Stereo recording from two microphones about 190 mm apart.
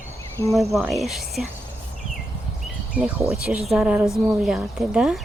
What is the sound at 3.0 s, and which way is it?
Speech, 5° right (ahead or behind).